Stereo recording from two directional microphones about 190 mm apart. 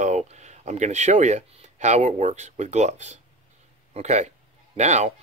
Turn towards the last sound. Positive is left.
turn(degrees=-35)  # may be behind; listen again after turning